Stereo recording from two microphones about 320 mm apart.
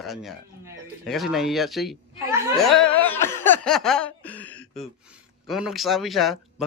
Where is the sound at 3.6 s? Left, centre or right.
Centre.